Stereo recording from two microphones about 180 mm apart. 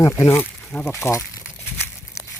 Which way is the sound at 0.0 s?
15° left (ahead or behind).